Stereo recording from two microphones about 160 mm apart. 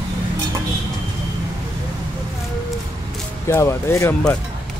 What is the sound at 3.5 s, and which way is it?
Speech, 20° left (ahead or behind).